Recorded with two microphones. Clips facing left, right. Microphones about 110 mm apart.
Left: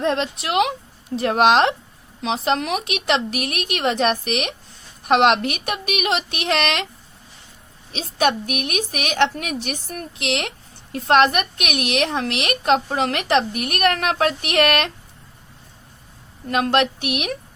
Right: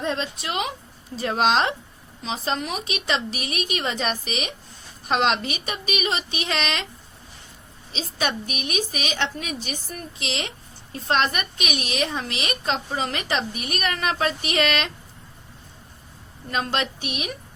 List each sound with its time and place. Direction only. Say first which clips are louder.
0.0 s a woman's voice: left 5 dB; 75° left (ahead or behind)
1.1 s a woman's voice: left 5 dB; 60° left (ahead or behind)
7.9 s a woman's voice: left 7 dB; 60° left (ahead or behind)
16.5 s a woman's voice: left 7 dB; 60° left (ahead or behind)